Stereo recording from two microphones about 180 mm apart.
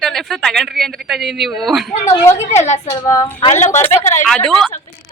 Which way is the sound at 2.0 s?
15° left (ahead or behind).